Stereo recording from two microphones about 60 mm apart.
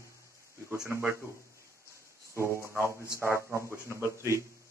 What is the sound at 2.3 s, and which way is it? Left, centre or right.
A man's voice, right.